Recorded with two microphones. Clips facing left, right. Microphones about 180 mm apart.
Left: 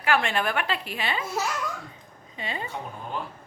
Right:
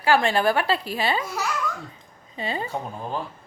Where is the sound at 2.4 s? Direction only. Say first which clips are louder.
Right 5 dB; 35° right (ahead or behind).